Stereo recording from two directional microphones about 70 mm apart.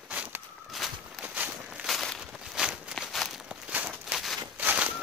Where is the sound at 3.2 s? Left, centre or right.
Centre.